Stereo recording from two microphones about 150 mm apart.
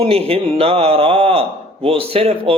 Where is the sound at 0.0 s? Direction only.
40° right (ahead or behind).